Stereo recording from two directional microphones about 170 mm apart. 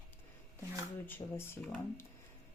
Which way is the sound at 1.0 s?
10° left (ahead or behind).